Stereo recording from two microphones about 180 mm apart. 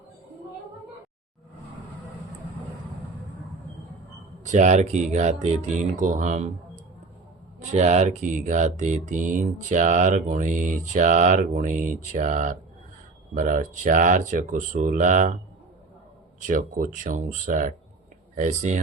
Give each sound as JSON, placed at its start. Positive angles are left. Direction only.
{"t": 4.4, "sound": "speech", "side_deg": -40}
{"t": 16.5, "sound": "speech", "side_deg": -50}